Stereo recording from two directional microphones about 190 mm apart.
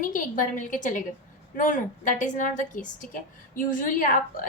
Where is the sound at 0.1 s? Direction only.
45° left (ahead or behind).